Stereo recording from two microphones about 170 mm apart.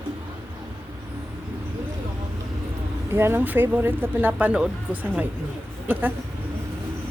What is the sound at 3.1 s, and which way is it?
Speech, 15° right (ahead or behind).